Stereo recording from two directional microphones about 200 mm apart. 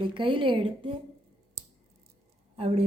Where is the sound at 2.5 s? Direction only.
30° right (ahead or behind).